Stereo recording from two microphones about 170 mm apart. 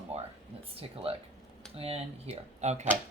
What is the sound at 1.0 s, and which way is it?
Speech, 35° right (ahead or behind).